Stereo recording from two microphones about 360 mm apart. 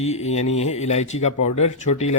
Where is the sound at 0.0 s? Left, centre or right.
Centre.